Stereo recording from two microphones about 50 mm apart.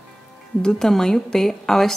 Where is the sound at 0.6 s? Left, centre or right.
Centre.